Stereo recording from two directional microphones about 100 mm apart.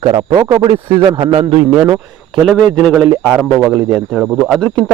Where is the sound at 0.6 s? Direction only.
50° right (ahead or behind).